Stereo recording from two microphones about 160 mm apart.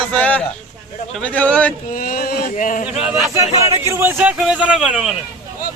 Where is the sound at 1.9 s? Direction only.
65° left (ahead or behind).